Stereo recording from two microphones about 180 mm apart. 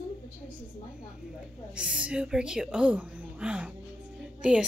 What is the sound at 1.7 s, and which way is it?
A woman's voice, 5° right (ahead or behind).